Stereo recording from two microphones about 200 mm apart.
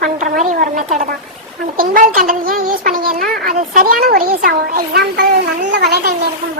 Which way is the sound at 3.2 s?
Centre (ahead or behind).